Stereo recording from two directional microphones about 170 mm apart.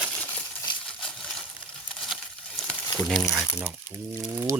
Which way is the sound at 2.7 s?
Centre (ahead or behind).